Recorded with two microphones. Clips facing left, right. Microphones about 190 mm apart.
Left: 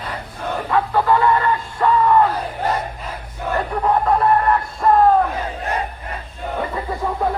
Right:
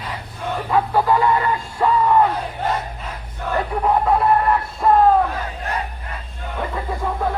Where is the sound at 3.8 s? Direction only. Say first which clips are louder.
Even; 5° right (ahead or behind).